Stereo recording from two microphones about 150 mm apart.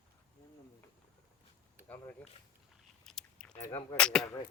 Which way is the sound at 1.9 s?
10° left (ahead or behind).